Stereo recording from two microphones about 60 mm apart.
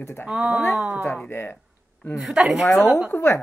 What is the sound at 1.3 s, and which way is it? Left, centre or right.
Speech, left.